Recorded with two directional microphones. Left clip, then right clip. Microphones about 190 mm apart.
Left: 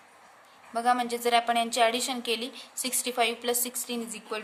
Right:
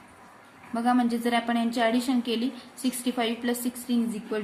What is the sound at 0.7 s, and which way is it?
A woman's voice, 25° left (ahead or behind).